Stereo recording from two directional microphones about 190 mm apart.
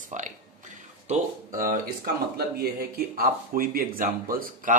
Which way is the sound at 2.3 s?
55° right (ahead or behind).